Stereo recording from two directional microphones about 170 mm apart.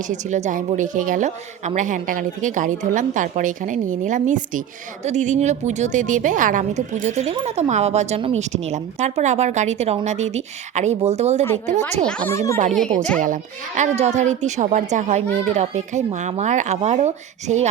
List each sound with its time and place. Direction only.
0.1 s a woman's voice: 45° right (ahead or behind)
12.3 s a child's voice: 15° left (ahead or behind)
13.1 s a woman's voice: 50° right (ahead or behind)